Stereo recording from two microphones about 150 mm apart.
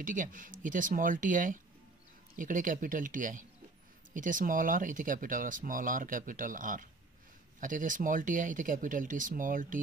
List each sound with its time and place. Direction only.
0.0 s speech: 60° right (ahead or behind)